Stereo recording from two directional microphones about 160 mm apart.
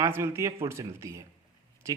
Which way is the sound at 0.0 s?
15° right (ahead or behind).